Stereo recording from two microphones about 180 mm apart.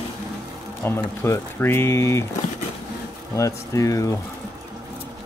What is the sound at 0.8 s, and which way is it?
Speech, 10° left (ahead or behind).